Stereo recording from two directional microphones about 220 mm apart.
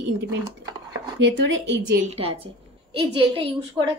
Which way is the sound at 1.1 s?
55° right (ahead or behind).